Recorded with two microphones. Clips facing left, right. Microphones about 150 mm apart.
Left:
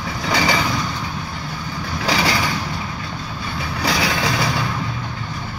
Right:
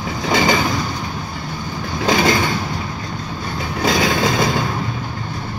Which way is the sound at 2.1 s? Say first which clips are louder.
Right 4 dB; 45° right (ahead or behind).